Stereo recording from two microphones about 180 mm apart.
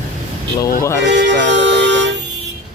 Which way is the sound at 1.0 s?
85° right.